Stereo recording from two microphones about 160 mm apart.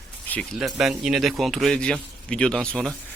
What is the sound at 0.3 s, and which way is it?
Speech, 10° left (ahead or behind).